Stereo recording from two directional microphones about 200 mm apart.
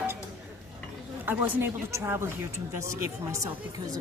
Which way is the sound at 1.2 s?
10° right (ahead or behind).